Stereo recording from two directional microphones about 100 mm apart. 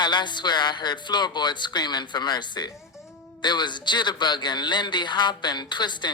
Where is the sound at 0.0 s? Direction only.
50° left (ahead or behind).